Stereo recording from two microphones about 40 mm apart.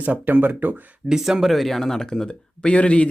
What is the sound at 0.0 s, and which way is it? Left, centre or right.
Speech, right.